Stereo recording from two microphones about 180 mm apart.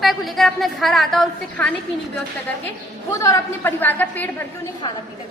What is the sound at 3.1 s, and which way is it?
A woman's voice, 15° left (ahead or behind).